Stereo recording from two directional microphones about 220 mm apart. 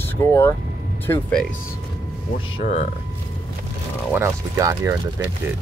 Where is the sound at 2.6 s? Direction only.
35° left (ahead or behind).